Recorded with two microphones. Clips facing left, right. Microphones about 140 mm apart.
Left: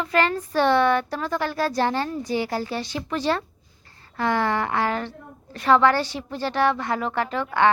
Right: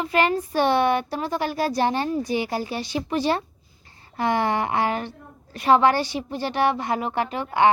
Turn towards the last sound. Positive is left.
turn(degrees=-15)  # may be behind; listen again after turning